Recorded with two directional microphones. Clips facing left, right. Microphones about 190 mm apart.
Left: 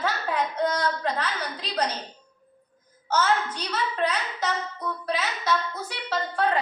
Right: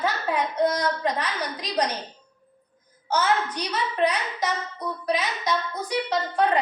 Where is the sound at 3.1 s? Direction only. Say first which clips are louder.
Right 1 dB; 10° right (ahead or behind).